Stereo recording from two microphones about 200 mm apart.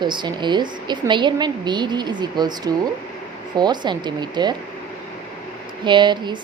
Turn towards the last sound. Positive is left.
turn(degrees=-25)  # may be behind; listen again after turning